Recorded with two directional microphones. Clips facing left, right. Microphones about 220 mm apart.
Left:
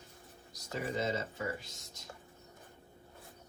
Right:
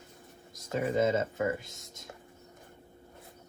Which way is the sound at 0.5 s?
50° right (ahead or behind).